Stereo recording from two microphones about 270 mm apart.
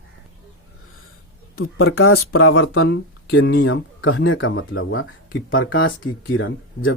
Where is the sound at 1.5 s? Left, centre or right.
Left.